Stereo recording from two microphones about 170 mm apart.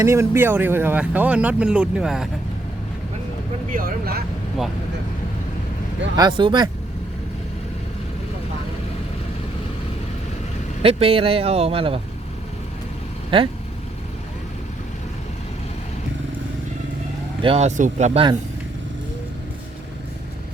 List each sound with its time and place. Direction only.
0.0 s speech: 15° right (ahead or behind)
3.7 s speech: 55° right (ahead or behind)
6.1 s speech: 25° right (ahead or behind)
10.8 s speech: 35° right (ahead or behind)
13.3 s speech: 30° right (ahead or behind)
17.4 s speech: 35° right (ahead or behind)